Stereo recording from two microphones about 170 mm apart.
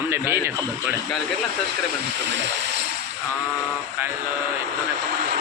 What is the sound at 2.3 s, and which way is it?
Speech, 90° right.